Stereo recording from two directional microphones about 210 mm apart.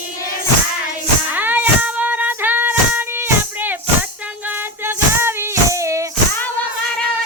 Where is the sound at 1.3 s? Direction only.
10° right (ahead or behind).